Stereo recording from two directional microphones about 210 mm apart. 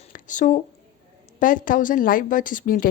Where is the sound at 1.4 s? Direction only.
40° left (ahead or behind).